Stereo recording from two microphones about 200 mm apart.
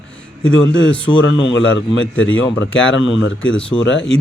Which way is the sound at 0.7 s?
70° left (ahead or behind).